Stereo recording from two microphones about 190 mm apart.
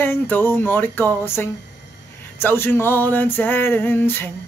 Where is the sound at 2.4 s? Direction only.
10° left (ahead or behind).